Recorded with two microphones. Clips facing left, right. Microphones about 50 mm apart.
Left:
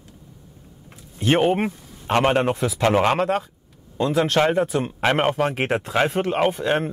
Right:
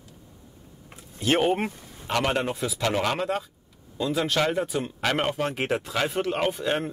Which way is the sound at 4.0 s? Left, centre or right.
Left.